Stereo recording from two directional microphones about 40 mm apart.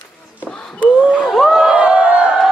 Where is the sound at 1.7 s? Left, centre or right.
Right.